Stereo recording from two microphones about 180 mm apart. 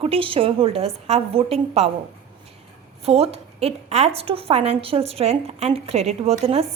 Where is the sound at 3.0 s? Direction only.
35° right (ahead or behind).